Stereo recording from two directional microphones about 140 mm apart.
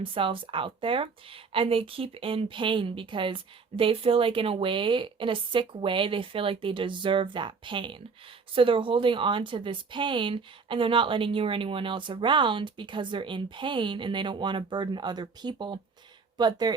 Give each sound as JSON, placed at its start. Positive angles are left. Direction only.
{"t": 0.0, "sound": "speech", "side_deg": -40}